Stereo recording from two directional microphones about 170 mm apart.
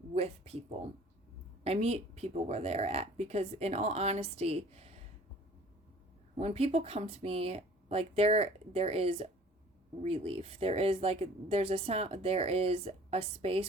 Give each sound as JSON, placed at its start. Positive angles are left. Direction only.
{"t": 0.1, "sound": "a sound", "side_deg": -35}
{"t": 1.6, "sound": "speech", "side_deg": -35}
{"t": 6.3, "sound": "speech", "side_deg": -35}